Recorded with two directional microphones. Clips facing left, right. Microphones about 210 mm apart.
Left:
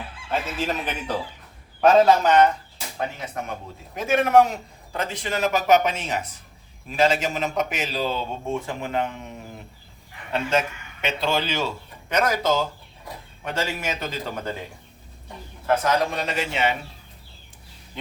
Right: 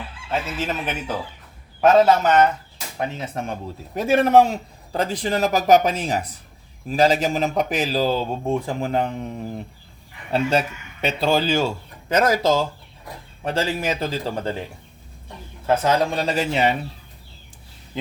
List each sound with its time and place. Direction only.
0.3 s speech: 5° right (ahead or behind)
3.0 s a man's voice: 25° right (ahead or behind)
10.3 s a man's voice: 35° right (ahead or behind)
13.4 s a man's voice: 35° right (ahead or behind)
15.8 s a man's voice: 30° right (ahead or behind)